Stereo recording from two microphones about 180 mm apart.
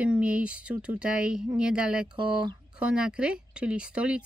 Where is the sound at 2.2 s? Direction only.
25° right (ahead or behind).